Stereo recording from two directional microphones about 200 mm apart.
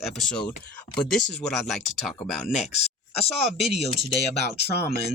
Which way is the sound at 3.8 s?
25° left (ahead or behind).